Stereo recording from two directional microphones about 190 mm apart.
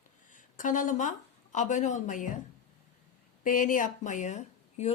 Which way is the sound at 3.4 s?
45° left (ahead or behind).